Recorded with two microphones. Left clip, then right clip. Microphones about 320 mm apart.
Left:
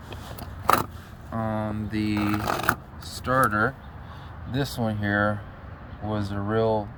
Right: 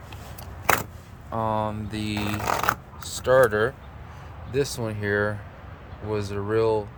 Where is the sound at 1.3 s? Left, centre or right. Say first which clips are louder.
Right 4 dB; centre.